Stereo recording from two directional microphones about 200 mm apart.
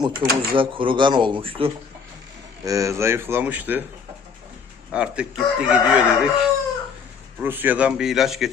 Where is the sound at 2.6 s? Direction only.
15° right (ahead or behind).